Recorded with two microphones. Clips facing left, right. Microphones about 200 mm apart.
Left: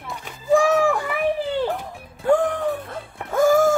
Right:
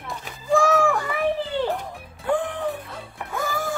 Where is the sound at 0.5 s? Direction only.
15° left (ahead or behind).